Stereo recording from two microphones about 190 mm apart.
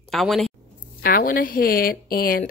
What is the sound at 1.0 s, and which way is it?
Speech, 50° left (ahead or behind).